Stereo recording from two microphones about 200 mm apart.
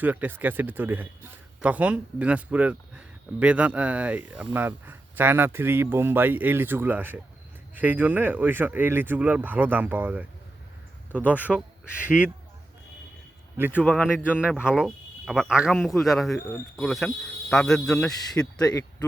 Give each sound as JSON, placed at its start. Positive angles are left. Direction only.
{"t": 0.0, "sound": "speech", "side_deg": -10}
{"t": 11.5, "sound": "speech", "side_deg": 0}
{"t": 13.6, "sound": "speech", "side_deg": -10}
{"t": 18.6, "sound": "speech", "side_deg": 20}